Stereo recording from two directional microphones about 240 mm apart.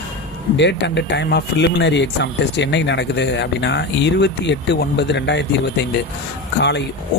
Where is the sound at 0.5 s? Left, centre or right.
Left.